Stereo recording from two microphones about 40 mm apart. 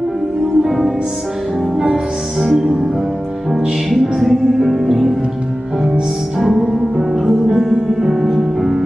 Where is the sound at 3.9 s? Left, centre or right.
Centre.